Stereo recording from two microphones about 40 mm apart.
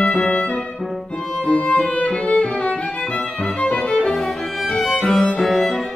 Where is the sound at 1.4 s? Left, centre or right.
Left.